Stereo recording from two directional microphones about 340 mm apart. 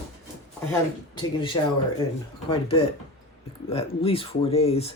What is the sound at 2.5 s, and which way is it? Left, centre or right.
Speech, centre.